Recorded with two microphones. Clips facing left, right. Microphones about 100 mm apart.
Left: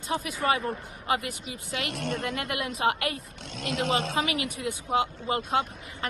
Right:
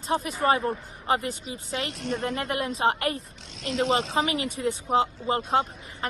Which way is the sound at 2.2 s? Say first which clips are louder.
Right 3 dB; 35° right (ahead or behind).